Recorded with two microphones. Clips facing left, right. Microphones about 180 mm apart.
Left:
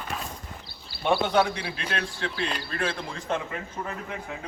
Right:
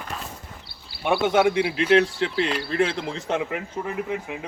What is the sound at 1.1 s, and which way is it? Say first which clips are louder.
A man's voice: right 3 dB; 15° right (ahead or behind).